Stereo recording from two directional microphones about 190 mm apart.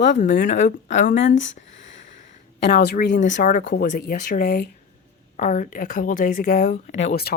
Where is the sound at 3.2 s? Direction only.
40° left (ahead or behind).